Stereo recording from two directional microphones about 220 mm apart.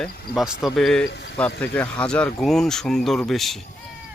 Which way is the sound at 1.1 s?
50° left (ahead or behind).